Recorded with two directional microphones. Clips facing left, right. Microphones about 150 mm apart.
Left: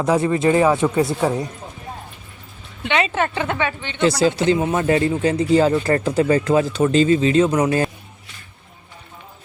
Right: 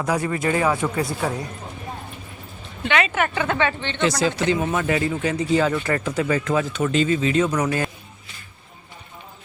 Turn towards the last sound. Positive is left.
turn(degrees=30)  # may be behind; listen again after turning